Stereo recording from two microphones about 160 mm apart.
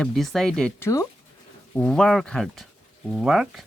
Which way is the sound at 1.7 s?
5° left (ahead or behind).